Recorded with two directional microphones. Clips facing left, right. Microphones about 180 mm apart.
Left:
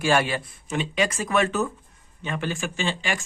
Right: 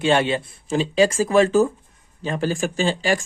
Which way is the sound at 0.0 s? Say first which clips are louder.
Right 3 dB; 25° right (ahead or behind).